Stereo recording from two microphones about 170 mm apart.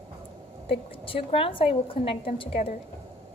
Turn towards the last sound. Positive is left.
turn(degrees=35)  # may be behind; listen again after turning